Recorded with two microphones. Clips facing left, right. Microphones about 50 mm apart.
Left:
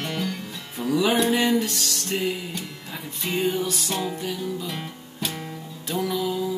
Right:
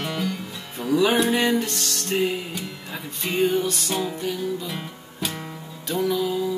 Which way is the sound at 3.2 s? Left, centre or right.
Centre.